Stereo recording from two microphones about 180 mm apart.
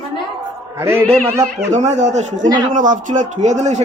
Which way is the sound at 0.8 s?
15° right (ahead or behind).